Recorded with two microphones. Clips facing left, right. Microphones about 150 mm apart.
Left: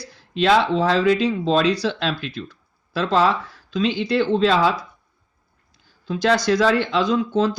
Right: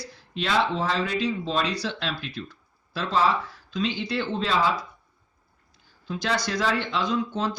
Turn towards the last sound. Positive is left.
turn(degrees=90)